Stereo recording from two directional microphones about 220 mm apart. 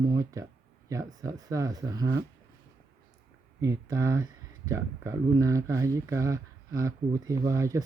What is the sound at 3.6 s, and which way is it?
Speech, 15° right (ahead or behind).